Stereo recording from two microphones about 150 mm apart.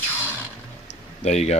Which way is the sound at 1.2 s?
50° left (ahead or behind).